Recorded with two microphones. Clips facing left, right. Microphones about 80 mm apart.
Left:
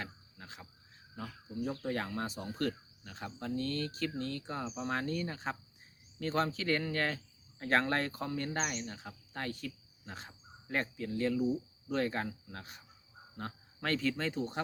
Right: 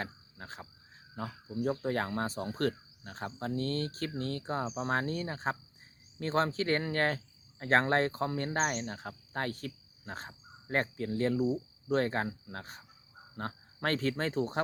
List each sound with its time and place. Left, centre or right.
0.0 s frog: right
1.1 s cricket: right
1.8 s speech: right